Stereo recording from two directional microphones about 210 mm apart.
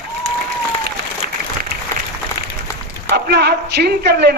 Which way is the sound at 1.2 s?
40° right (ahead or behind).